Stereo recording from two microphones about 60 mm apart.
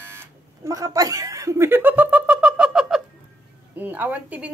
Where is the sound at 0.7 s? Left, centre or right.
Right.